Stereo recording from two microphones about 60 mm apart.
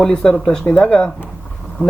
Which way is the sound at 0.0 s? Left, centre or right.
Centre.